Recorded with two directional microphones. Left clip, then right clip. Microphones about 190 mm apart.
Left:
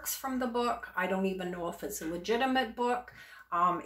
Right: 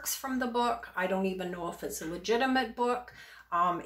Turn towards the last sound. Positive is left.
turn(degrees=5)  # may be behind; listen again after turning